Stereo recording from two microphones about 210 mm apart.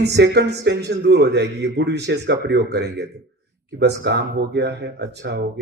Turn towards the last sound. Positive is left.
turn(degrees=-55)  # may be behind; listen again after turning